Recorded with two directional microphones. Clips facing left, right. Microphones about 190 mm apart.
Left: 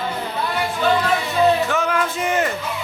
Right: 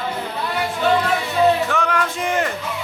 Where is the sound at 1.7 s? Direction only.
5° left (ahead or behind).